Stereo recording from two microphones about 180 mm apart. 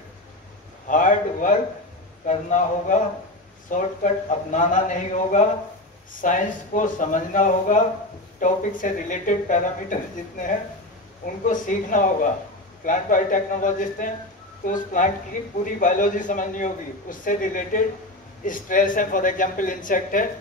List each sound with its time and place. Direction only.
0.8 s a man's voice: 45° left (ahead or behind)